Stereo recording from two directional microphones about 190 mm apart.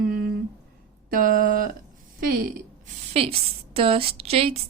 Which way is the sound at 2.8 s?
30° right (ahead or behind).